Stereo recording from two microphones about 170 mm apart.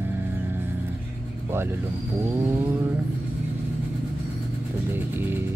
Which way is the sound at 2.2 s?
15° right (ahead or behind).